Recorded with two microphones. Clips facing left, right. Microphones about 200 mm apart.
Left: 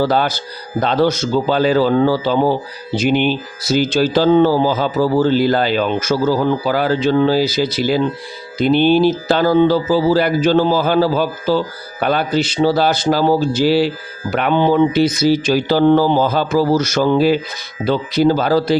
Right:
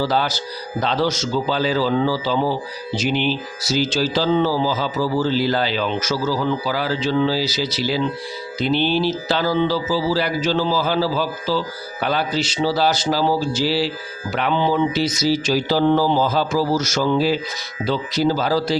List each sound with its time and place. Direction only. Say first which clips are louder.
0.0 s speech: left 4 dB; 55° left (ahead or behind)